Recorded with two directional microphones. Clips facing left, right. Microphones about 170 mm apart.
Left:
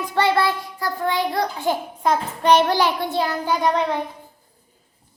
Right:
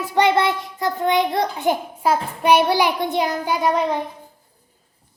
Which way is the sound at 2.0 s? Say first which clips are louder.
Even; 10° right (ahead or behind).